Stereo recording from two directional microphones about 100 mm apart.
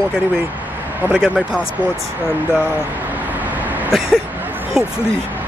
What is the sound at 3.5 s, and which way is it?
Vehicle, 15° right (ahead or behind).